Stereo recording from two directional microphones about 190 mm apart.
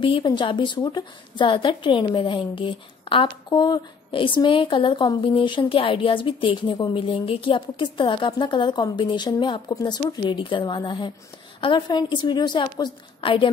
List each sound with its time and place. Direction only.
0.0 s speech: 25° left (ahead or behind)